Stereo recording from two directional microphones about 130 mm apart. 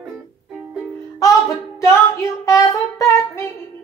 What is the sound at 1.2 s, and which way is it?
Music, 25° left (ahead or behind).